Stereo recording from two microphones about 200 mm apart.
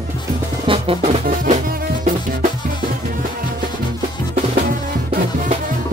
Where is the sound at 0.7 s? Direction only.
30° right (ahead or behind).